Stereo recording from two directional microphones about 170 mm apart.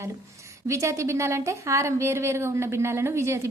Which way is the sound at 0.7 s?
15° right (ahead or behind).